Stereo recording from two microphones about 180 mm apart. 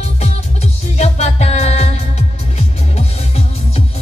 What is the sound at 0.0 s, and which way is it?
Music, 35° left (ahead or behind).